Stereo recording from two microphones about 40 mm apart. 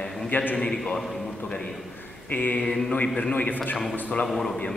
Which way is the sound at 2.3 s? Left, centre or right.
Left.